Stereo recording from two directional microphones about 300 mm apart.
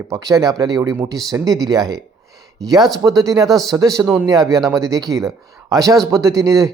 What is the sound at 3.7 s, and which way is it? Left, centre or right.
A man's voice, centre.